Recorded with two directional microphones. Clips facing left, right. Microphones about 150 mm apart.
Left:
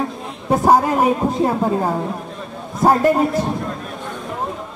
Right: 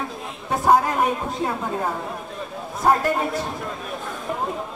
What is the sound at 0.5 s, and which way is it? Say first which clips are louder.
Speech: left 4 dB; 35° left (ahead or behind).